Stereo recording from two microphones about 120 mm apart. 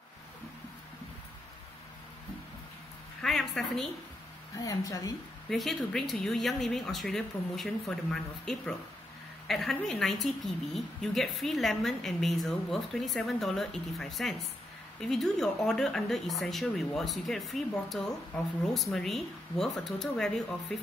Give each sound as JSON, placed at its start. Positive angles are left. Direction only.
{"t": 3.2, "sound": "speech", "side_deg": 0}
{"t": 4.6, "sound": "a woman's voice", "side_deg": 30}
{"t": 5.5, "sound": "speech", "side_deg": 0}